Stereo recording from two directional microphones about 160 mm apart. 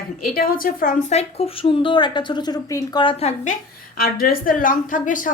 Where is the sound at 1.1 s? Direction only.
40° left (ahead or behind).